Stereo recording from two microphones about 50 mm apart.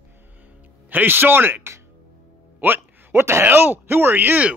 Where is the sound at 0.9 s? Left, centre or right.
Right.